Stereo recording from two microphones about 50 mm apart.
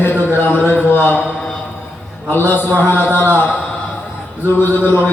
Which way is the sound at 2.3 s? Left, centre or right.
Left.